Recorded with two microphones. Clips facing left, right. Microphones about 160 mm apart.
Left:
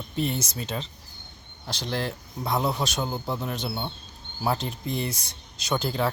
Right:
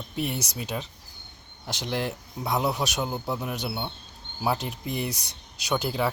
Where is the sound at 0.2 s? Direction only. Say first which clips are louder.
Left 2 dB; 10° right (ahead or behind).